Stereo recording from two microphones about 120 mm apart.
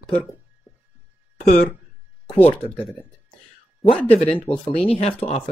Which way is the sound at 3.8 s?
50° left (ahead or behind).